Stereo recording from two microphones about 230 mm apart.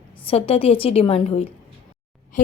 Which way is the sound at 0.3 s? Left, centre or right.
Left.